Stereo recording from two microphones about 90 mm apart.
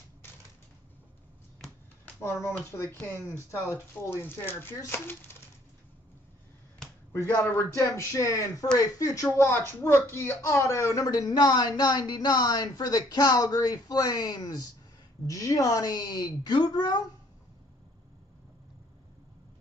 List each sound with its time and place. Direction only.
2.6 s speech: 30° left (ahead or behind)
7.2 s speech: 25° left (ahead or behind)
7.8 s speech: 35° left (ahead or behind)